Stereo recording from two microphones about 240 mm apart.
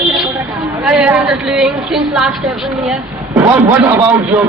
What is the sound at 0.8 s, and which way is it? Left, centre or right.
A woman's voice, centre.